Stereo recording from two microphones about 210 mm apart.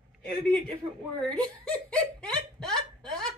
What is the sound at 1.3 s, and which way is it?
Hiccup, 5° left (ahead or behind).